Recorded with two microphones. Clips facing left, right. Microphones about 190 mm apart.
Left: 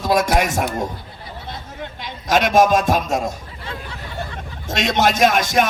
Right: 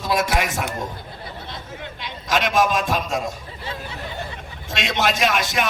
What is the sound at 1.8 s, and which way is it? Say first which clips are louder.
A man's voice: left 3 dB; 45° left (ahead or behind).